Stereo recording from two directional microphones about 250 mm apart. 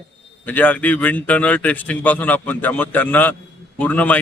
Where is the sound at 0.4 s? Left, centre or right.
Centre.